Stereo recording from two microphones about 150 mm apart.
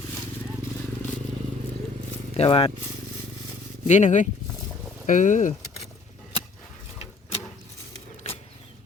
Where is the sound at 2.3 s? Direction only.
40° left (ahead or behind).